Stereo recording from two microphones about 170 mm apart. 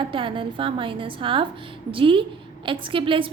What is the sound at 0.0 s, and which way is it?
A woman's voice, 30° right (ahead or behind).